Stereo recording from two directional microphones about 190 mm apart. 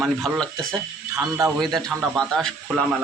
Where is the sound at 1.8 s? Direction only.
Centre (ahead or behind).